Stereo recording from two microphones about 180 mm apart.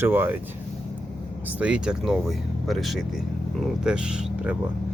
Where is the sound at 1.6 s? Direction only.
5° right (ahead or behind).